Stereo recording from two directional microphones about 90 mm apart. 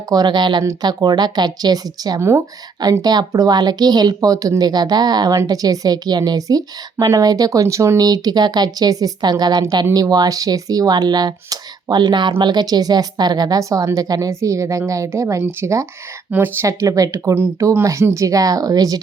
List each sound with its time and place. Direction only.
0.1 s a woman's voice: 50° right (ahead or behind); by 15.9 s 35° right (ahead or behind)
16.3 s speech: 20° right (ahead or behind)
16.6 s speech: 40° right (ahead or behind)